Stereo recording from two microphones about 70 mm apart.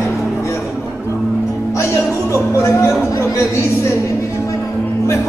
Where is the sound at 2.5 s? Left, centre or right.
Left.